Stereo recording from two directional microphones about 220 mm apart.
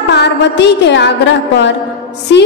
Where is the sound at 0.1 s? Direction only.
50° left (ahead or behind).